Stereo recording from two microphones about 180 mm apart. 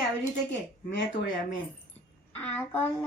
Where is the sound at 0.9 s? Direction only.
80° left.